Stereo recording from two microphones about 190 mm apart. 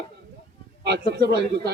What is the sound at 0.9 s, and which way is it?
Speech, 60° right (ahead or behind).